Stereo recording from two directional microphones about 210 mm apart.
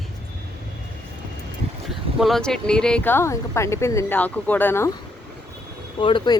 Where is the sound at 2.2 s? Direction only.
Centre (ahead or behind).